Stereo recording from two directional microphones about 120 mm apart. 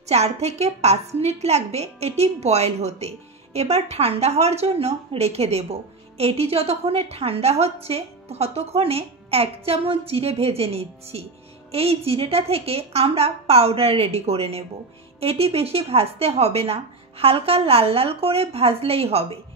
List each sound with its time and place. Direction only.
0.1 s a woman's voice: 65° right (ahead or behind)